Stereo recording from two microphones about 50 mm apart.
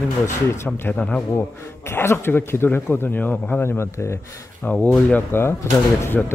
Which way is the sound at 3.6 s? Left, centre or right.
Left.